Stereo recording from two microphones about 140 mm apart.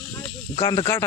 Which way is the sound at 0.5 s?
30° left (ahead or behind).